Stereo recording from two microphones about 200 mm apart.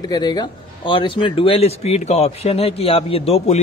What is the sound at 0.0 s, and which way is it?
A man's voice, 20° left (ahead or behind).